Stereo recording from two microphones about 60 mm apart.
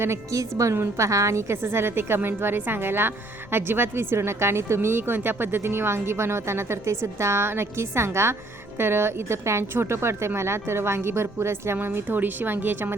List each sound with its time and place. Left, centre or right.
0.0 s a woman's voice: right
12.0 s a woman's voice: right